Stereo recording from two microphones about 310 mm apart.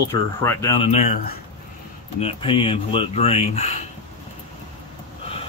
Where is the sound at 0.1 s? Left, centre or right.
Centre.